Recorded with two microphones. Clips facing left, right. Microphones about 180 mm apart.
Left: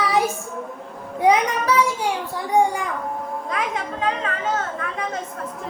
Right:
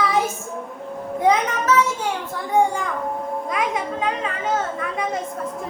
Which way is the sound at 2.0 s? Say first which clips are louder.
Left 1 dB; 15° left (ahead or behind).